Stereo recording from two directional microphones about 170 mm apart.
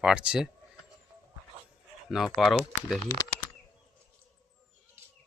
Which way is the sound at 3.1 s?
20° left (ahead or behind).